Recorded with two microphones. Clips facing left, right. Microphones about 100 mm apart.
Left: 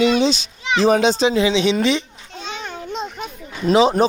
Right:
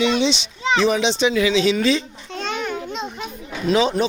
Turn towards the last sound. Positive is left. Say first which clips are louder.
# left 4 dB
turn(degrees=35)  # may be behind; listen again after turning